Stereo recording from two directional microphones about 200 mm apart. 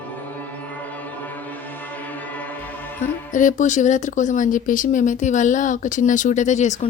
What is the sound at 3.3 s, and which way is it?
Speech, 40° left (ahead or behind).